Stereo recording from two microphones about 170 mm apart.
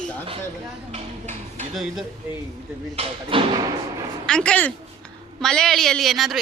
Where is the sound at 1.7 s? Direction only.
Centre (ahead or behind).